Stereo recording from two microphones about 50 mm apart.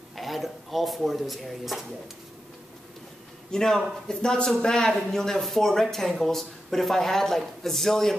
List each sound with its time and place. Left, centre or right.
0.1 s speech: centre
3.5 s speech: centre